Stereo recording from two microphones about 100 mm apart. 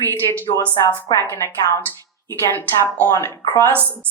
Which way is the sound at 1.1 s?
40° left (ahead or behind).